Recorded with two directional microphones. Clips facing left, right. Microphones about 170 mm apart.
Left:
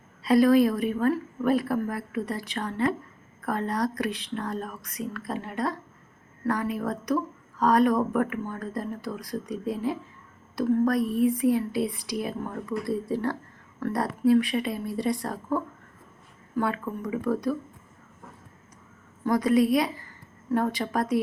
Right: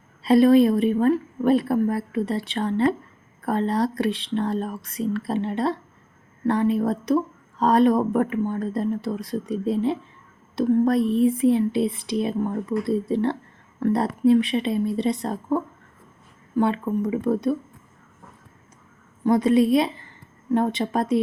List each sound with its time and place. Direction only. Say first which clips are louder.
0.2 s speech: right 4 dB; 25° right (ahead or behind)
19.2 s speech: right 4 dB; 25° right (ahead or behind)